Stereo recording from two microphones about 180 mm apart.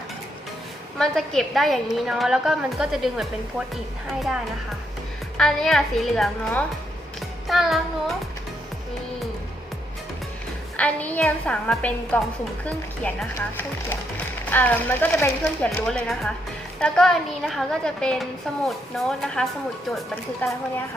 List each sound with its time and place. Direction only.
0.9 s a woman's voice: centre (ahead or behind)
5.4 s a woman's voice: centre (ahead or behind)
10.8 s speech: 5° left (ahead or behind)
14.5 s a woman's voice: 10° left (ahead or behind)